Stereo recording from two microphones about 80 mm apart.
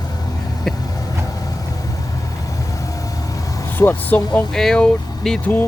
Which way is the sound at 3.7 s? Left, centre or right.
Left.